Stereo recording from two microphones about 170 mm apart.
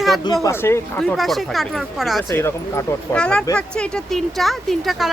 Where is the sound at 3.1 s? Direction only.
5° left (ahead or behind).